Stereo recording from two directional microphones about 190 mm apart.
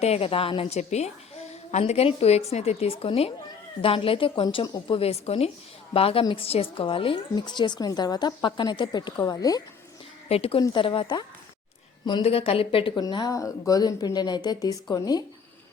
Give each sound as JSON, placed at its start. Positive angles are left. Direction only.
{"t": 0.0, "sound": "a woman's voice", "side_deg": 30}
{"t": 10.2, "sound": "a woman's voice", "side_deg": 30}